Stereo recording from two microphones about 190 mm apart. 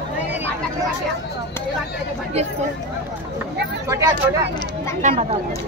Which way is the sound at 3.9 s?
15° right (ahead or behind).